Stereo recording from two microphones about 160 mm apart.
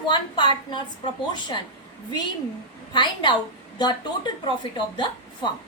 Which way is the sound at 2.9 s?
30° left (ahead or behind).